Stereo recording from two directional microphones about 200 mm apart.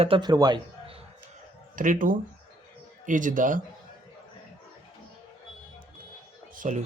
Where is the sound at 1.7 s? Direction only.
40° right (ahead or behind).